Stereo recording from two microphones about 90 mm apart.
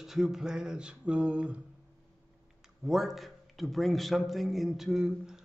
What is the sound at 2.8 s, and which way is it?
A man's voice, 5° right (ahead or behind).